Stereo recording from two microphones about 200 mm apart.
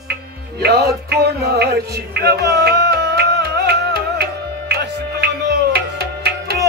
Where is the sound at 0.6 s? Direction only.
55° right (ahead or behind).